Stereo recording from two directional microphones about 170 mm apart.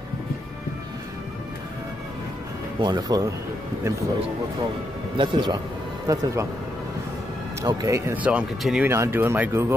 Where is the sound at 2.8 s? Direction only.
20° right (ahead or behind).